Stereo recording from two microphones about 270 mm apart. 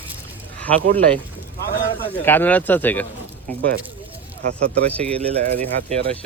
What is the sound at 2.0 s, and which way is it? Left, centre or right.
Speech, centre.